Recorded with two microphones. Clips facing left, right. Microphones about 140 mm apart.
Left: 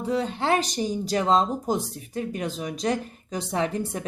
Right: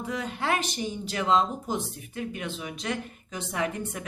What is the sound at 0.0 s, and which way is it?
Speech, 30° left (ahead or behind).